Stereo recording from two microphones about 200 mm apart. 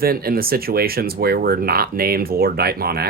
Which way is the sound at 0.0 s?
50° right (ahead or behind).